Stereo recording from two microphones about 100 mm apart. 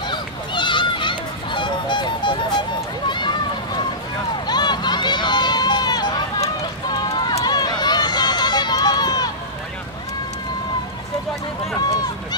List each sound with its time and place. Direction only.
0.1 s honk: 50° left (ahead or behind)
3.1 s run: 50° left (ahead or behind)
4.5 s run: 45° left (ahead or behind)
11.8 s run: 40° left (ahead or behind)